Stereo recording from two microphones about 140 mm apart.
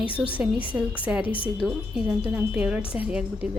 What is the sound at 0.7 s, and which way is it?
Speech, centre (ahead or behind).